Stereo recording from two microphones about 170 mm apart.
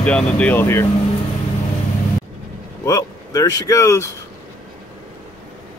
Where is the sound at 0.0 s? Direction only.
5° left (ahead or behind).